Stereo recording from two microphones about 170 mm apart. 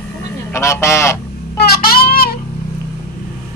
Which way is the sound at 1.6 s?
65° left (ahead or behind).